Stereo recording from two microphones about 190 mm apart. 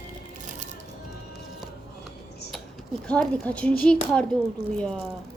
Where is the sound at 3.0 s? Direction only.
5° left (ahead or behind).